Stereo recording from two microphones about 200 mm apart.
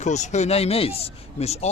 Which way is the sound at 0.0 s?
35° left (ahead or behind).